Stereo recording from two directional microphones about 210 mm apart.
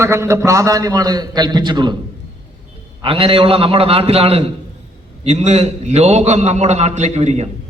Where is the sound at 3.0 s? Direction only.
25° right (ahead or behind).